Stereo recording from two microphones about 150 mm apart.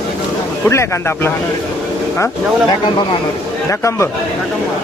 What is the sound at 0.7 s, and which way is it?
Speech, 15° left (ahead or behind).